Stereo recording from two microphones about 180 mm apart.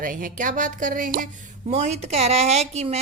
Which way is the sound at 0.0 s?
50° right (ahead or behind).